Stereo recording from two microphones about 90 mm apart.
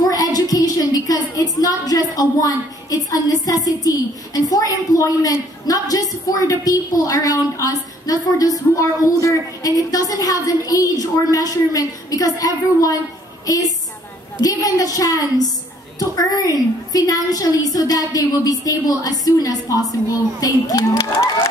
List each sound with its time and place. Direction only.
0.1 s a woman's voice: 45° left (ahead or behind)